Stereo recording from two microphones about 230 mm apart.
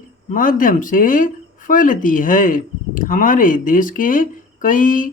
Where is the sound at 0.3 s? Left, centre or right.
Left.